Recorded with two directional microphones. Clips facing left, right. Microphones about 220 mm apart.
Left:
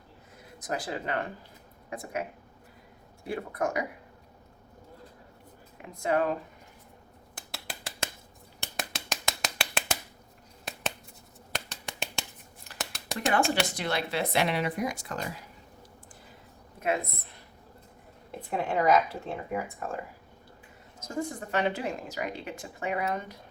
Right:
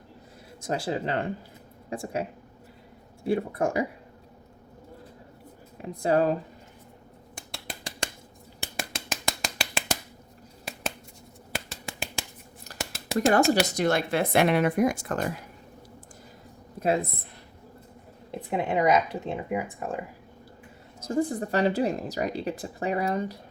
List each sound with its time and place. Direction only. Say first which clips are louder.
0.6 s a woman's voice: right 5 dB; 25° right (ahead or behind)
3.2 s speech: right 6 dB; 30° right (ahead or behind)
5.7 s speech: right 4 dB; 35° right (ahead or behind)
7.3 s a sound: right 2 dB; 5° left (ahead or behind)
8.6 s finger snapping: right 2 dB; centre (ahead or behind)
10.7 s scissors: right 1 dB; centre (ahead or behind)
11.5 s finger snapping: right 2 dB; centre (ahead or behind)
12.7 s a sound: right 3 dB; centre (ahead or behind)
13.7 s speech: right 7 dB; 45° right (ahead or behind)
16.8 s a woman's voice: right 4 dB; 35° right (ahead or behind)
18.3 s speech: right 3 dB; 20° right (ahead or behind)
21.0 s a woman's voice: right 7 dB; 35° right (ahead or behind)